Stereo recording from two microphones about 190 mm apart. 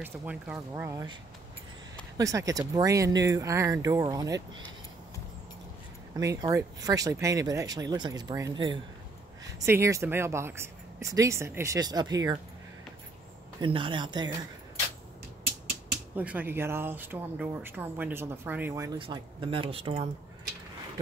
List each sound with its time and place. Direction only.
0.0 s speech: 10° right (ahead or behind)
2.1 s speech: 15° right (ahead or behind)
6.1 s speech: 20° right (ahead or behind)
13.6 s speech: 25° right (ahead or behind)
16.2 s speech: 10° right (ahead or behind); by 20.1 s 30° right (ahead or behind)